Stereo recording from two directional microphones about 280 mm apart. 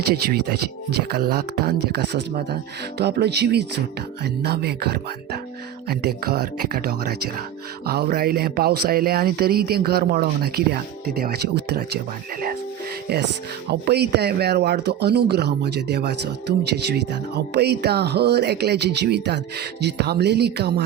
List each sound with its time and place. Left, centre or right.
0.1 s speech: right
13.7 s speech: right